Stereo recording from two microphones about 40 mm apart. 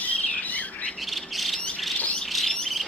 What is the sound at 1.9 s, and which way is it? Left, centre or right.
Bird, left.